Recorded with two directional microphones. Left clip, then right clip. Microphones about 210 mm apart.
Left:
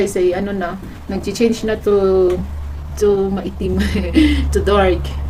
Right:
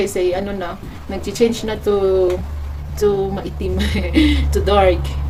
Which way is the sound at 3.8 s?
10° left (ahead or behind).